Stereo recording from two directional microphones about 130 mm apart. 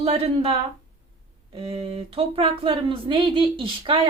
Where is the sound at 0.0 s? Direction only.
50° right (ahead or behind).